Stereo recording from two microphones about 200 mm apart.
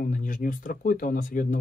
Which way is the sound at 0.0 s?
40° left (ahead or behind).